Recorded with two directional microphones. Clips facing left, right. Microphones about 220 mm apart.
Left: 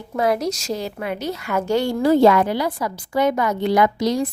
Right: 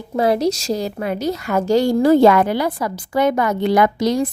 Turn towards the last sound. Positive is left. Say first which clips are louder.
# right 2 dB
turn(degrees=-55)  # may be behind; listen again after turning